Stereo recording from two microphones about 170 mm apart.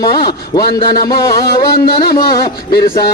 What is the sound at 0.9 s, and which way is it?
Music, 20° left (ahead or behind).